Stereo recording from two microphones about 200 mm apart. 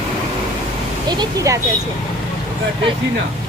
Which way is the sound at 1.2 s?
15° right (ahead or behind).